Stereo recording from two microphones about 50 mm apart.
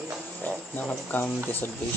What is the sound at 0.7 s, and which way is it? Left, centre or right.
Speech, left.